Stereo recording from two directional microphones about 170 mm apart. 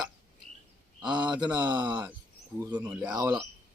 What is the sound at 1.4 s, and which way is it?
Speech, 25° right (ahead or behind).